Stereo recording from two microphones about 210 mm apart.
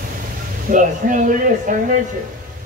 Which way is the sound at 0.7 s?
40° right (ahead or behind).